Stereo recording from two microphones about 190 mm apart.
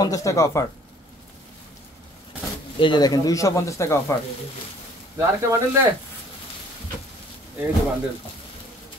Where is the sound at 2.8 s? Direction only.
20° left (ahead or behind).